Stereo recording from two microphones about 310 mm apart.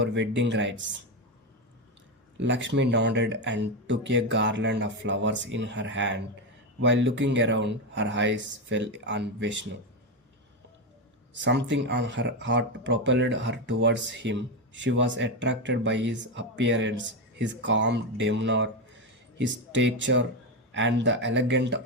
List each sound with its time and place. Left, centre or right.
0.0 s speech: right
2.4 s speech: right
11.4 s speech: right